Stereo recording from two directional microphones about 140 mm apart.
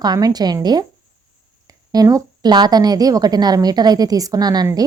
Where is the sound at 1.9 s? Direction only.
25° right (ahead or behind).